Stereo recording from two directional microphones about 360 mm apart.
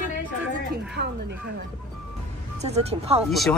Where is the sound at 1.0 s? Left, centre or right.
Right.